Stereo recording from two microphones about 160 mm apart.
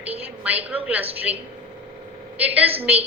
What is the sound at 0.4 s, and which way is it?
Speech, 10° right (ahead or behind).